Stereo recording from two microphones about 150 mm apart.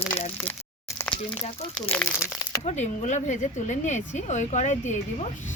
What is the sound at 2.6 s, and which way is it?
Speech, 50° left (ahead or behind).